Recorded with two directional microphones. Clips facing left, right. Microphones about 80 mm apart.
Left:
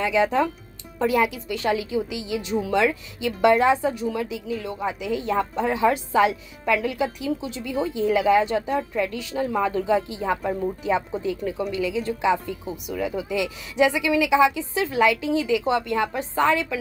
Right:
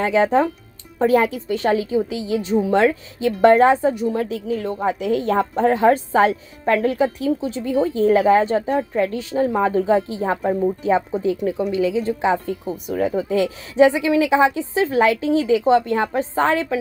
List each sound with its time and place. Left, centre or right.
0.0 s a woman's voice: right